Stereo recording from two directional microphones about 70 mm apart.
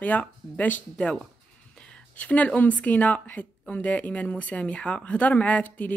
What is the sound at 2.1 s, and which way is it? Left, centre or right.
Speech, centre.